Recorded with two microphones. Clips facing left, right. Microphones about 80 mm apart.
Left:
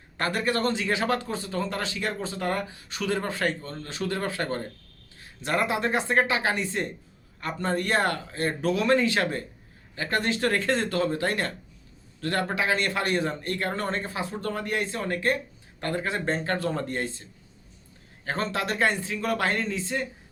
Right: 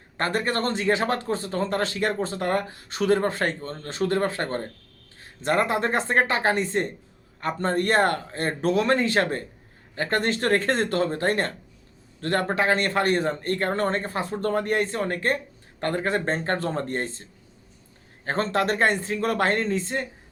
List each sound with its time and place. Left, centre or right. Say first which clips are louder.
0.2 s speech: right 1 dB; right
18.3 s speech: right 5 dB; right